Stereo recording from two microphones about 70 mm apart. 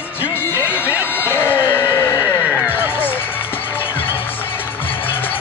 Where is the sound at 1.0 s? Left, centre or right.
Left.